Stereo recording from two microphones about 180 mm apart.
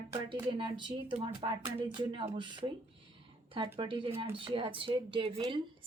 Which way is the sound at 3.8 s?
30° right (ahead or behind).